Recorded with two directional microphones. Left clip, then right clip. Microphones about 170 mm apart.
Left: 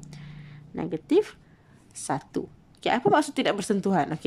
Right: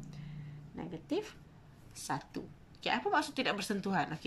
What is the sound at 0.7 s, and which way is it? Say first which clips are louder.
Speech: left 15 dB; 50° left (ahead or behind).